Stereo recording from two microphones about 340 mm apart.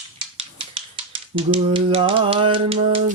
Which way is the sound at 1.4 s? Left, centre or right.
Centre.